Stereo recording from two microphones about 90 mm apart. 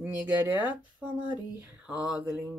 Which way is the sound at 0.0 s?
20° right (ahead or behind).